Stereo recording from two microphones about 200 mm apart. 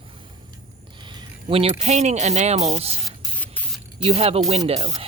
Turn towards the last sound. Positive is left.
turn(degrees=-30)  # may be behind; listen again after turning